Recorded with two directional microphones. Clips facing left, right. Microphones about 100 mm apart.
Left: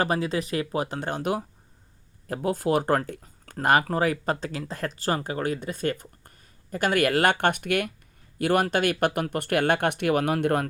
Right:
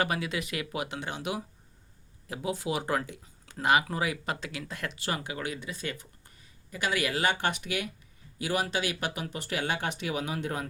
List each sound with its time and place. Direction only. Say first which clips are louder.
0.0 s speech: left 5 dB; 35° left (ahead or behind); by 10.7 s 60° left (ahead or behind)